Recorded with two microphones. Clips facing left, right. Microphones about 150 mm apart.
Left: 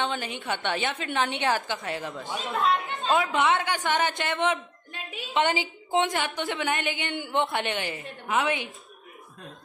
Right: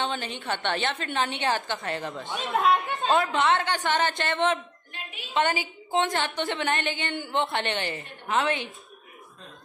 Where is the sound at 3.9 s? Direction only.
15° left (ahead or behind).